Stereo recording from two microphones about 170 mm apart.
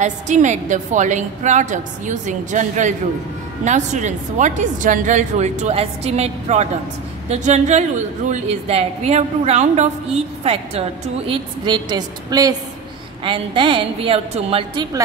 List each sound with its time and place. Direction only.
0.0 s a woman's voice: 45° right (ahead or behind)
11.2 s a woman's voice: 25° right (ahead or behind)